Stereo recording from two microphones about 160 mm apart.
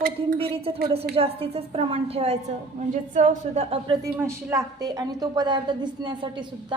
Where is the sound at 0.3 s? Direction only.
35° right (ahead or behind).